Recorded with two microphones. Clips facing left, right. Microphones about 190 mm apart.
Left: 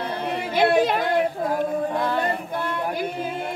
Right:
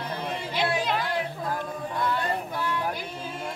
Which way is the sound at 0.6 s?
55° left (ahead or behind).